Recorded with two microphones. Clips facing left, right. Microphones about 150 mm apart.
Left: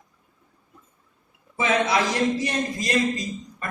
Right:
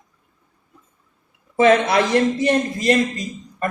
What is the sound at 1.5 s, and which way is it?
A man's voice, 60° right (ahead or behind).